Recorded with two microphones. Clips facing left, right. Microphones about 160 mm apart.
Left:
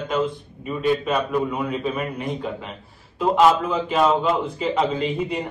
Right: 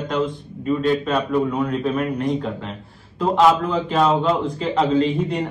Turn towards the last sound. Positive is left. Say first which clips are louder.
# right 5 dB
turn(degrees=5)  # may be behind; listen again after turning